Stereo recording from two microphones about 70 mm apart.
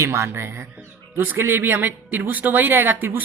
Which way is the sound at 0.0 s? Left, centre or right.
Right.